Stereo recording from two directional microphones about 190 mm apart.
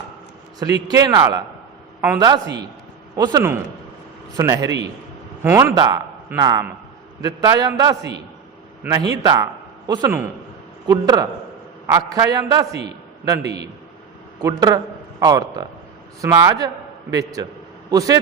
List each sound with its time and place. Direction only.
0.6 s a man's voice: 20° right (ahead or behind)
13.4 s a man's voice: 65° right (ahead or behind)
14.4 s a man's voice: 20° right (ahead or behind)